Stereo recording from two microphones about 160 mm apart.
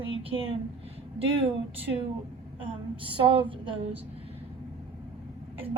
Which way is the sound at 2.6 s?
30° right (ahead or behind).